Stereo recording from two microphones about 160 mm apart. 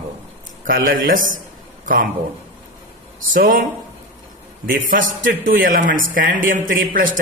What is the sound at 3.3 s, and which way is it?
Speech, 60° right (ahead or behind).